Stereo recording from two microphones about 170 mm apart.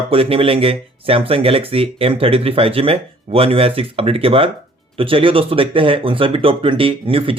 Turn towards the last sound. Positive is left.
turn(degrees=-30)  # may be behind; listen again after turning